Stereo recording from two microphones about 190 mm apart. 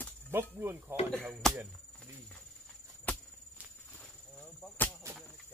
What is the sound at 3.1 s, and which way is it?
Cricket, 10° left (ahead or behind).